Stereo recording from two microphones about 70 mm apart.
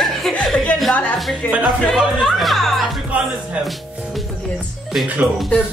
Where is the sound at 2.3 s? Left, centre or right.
Centre.